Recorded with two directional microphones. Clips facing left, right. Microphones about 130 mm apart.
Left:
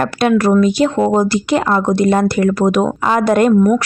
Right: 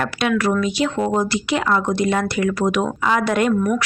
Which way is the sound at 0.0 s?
40° left (ahead or behind).